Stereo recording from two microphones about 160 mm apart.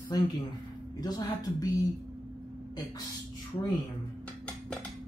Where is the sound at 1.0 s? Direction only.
25° left (ahead or behind).